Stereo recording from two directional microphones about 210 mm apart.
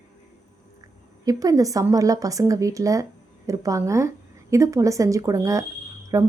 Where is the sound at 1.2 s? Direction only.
15° right (ahead or behind).